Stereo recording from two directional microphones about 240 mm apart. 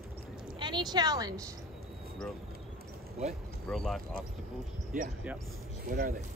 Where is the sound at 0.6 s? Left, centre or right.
Centre.